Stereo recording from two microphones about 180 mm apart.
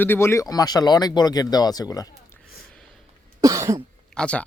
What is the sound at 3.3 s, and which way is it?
Cough, 20° right (ahead or behind).